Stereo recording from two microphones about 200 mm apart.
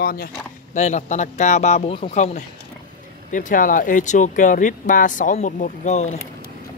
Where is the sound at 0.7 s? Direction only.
35° left (ahead or behind).